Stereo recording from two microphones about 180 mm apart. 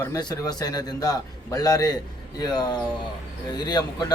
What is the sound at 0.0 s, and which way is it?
A man's voice, 20° left (ahead or behind).